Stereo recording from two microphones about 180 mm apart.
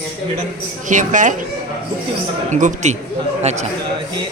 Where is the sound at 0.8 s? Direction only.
45° right (ahead or behind).